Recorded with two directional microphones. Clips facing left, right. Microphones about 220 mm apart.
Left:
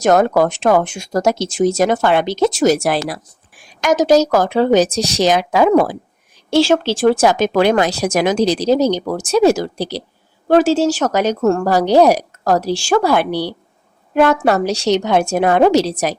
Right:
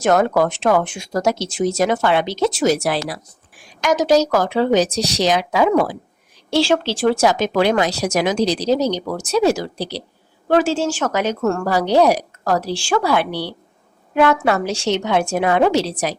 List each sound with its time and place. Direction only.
0.0 s a woman's voice: 40° left (ahead or behind)